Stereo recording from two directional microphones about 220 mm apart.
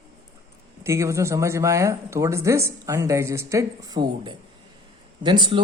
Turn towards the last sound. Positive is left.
turn(degrees=-20)  # may be behind; listen again after turning